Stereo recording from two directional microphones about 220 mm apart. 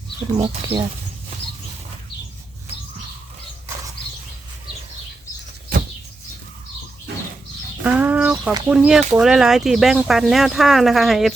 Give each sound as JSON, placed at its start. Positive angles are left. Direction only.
{"t": 0.3, "sound": "speech", "side_deg": -30}
{"t": 7.9, "sound": "speech", "side_deg": -5}